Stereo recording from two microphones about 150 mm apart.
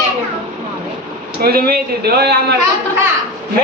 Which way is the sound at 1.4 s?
90° right.